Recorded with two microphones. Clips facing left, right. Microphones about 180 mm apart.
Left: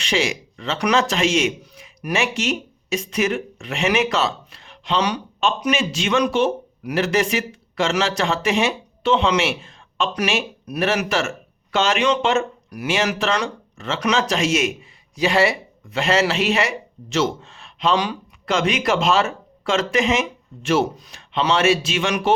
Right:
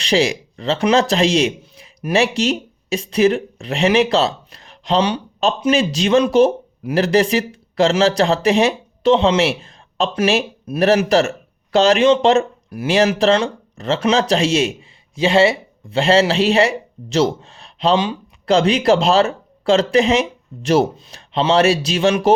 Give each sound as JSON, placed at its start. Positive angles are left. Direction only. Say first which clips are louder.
{"t": 0.0, "sound": "speech", "louder": "right 5 dB", "side_deg": -35}